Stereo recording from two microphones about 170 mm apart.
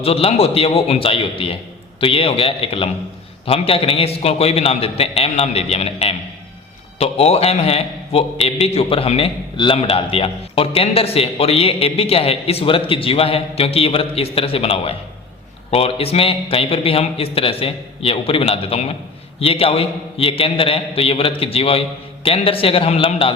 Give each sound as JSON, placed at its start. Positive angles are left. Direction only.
{"t": 0.0, "sound": "a man's voice", "side_deg": 35}